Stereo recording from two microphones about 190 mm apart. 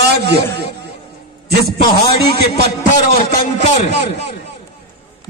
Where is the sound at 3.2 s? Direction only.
40° left (ahead or behind).